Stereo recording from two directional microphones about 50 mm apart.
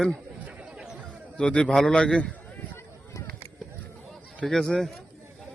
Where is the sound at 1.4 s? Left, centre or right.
Centre.